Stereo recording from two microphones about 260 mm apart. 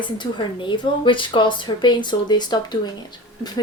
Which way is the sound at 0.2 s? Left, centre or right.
Centre.